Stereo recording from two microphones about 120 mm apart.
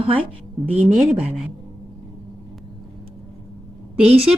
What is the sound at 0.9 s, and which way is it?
Speech, 5° right (ahead or behind).